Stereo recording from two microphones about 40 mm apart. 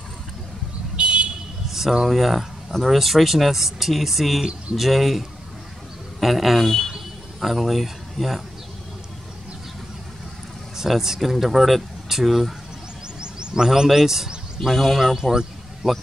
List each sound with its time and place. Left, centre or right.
0.9 s vehicle: right
1.7 s a sound: centre
2.0 s a man's voice: centre
10.8 s speech: centre
13.2 s a sound: right
13.9 s a man's voice: centre
14.7 s speech: centre
15.8 s a man's voice: centre